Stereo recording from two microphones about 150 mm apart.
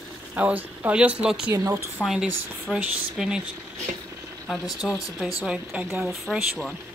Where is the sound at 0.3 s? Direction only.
10° right (ahead or behind).